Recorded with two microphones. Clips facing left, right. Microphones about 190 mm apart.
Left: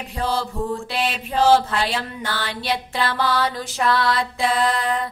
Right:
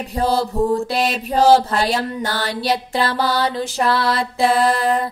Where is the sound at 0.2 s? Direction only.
40° right (ahead or behind).